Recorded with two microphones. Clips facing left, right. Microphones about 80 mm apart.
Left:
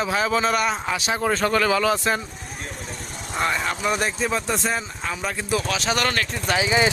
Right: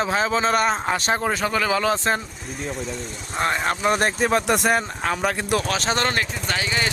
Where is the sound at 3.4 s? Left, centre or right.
Right.